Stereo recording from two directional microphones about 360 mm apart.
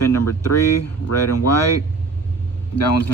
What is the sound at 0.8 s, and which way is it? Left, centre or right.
Speech, left.